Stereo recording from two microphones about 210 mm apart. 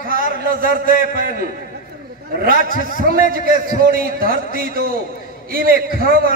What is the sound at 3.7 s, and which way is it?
A man's voice, 45° right (ahead or behind).